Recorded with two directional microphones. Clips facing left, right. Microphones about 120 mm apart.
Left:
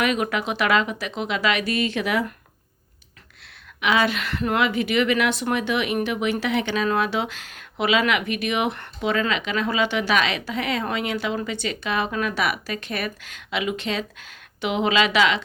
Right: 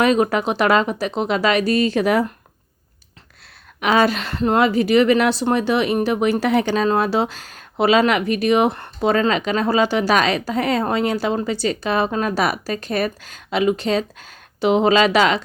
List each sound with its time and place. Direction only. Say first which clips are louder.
0.0 s a woman's voice: right 7 dB; 35° right (ahead or behind)
3.8 s a woman's voice: right 5 dB; 40° right (ahead or behind)